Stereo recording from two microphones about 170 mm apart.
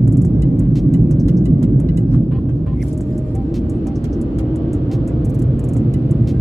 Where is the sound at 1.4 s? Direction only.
15° right (ahead or behind).